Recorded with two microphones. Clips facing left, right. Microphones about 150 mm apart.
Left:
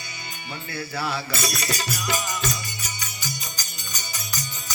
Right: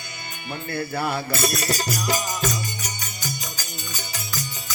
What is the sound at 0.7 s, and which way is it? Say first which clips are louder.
Music: right 3 dB; 50° right (ahead or behind).